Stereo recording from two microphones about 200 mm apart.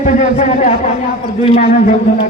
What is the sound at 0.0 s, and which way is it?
Speech, 35° left (ahead or behind).